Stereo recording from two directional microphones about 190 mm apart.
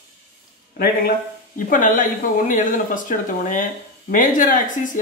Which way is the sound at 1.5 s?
45° left (ahead or behind).